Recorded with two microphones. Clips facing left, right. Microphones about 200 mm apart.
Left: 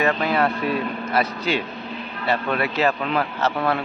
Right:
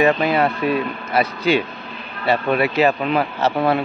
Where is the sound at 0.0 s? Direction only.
10° right (ahead or behind).